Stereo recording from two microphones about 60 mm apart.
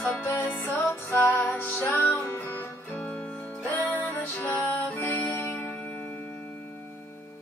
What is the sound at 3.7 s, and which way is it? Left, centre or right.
Music, left.